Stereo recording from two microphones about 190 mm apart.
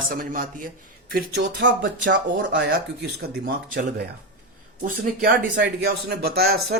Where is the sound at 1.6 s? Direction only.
75° right (ahead or behind).